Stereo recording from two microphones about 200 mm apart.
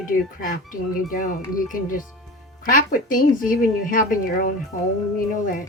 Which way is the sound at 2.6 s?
45° left (ahead or behind).